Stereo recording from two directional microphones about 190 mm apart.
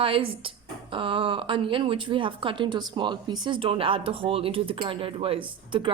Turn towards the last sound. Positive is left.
turn(degrees=-25)  # may be behind; listen again after turning